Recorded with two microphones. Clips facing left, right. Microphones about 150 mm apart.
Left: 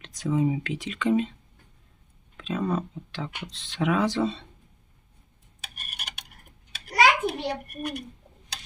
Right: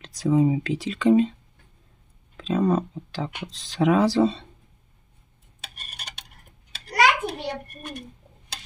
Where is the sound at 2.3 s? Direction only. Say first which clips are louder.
Right 6 dB; 35° right (ahead or behind).